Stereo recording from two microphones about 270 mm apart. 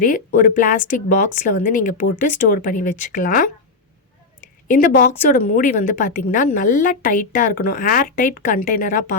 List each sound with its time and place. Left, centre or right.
0.0 s a woman's voice: left
4.7 s a woman's voice: left